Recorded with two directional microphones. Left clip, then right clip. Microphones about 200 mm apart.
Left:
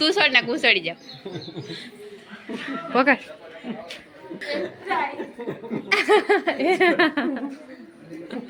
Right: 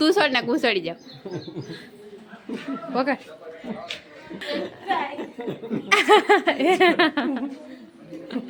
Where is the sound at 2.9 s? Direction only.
15° left (ahead or behind).